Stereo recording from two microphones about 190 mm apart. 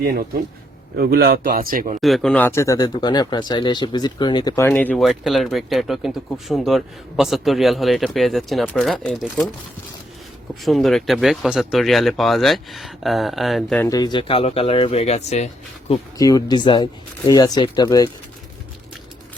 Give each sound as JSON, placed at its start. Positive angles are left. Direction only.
{"t": 0.0, "sound": "speech", "side_deg": -55}
{"t": 2.0, "sound": "speech", "side_deg": 0}
{"t": 10.6, "sound": "speech", "side_deg": 0}
{"t": 13.8, "sound": "speech", "side_deg": 20}
{"t": 16.1, "sound": "speech", "side_deg": 20}